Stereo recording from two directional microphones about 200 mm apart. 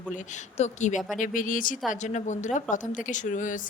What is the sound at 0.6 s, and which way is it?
Speech, 35° left (ahead or behind).